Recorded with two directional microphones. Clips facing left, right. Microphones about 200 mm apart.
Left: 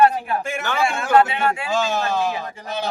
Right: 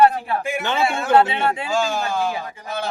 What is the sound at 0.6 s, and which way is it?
A man's voice, 20° right (ahead or behind).